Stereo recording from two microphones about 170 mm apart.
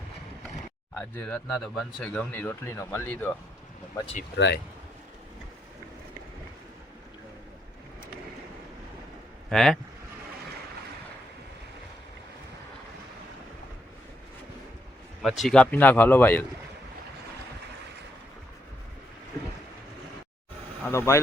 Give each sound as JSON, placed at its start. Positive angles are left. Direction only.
{"t": 0.9, "sound": "speech", "side_deg": 10}
{"t": 4.4, "sound": "speech", "side_deg": 90}
{"t": 9.5, "sound": "speech", "side_deg": 5}
{"t": 15.2, "sound": "speech", "side_deg": 0}
{"t": 20.8, "sound": "speech", "side_deg": 15}